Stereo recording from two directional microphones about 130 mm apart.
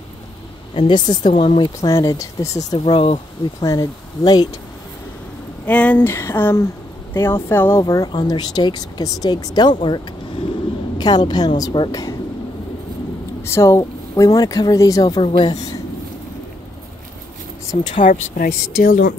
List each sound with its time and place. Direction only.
0.7 s speech: 35° left (ahead or behind)
1.8 s speech: 25° left (ahead or behind)
2.8 s speech: 45° left (ahead or behind)
3.6 s speech: 25° left (ahead or behind)
5.7 s speech: 10° left (ahead or behind)
8.1 s speech: 35° left (ahead or behind)
13.4 s speech: 20° left (ahead or behind)
15.1 s speech: 40° left (ahead or behind)
17.6 s speech: 65° left (ahead or behind); by 19.1 s 90° left